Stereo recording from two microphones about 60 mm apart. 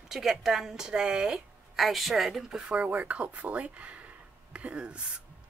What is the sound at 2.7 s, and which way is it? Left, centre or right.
Speech, right.